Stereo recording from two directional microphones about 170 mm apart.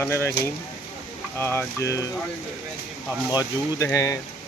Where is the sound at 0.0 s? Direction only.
15° left (ahead or behind).